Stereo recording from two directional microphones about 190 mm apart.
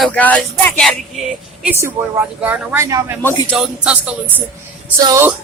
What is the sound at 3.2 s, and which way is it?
Speech, 10° left (ahead or behind).